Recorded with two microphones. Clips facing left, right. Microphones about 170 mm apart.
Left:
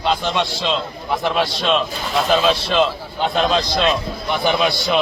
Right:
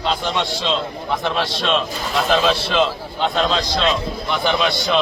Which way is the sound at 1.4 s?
Centre (ahead or behind).